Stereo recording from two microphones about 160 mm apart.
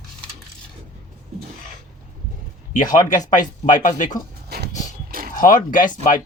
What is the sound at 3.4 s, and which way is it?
Speech, 55° left (ahead or behind).